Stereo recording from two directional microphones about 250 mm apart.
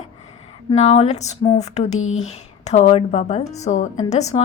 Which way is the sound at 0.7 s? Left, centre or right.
Left.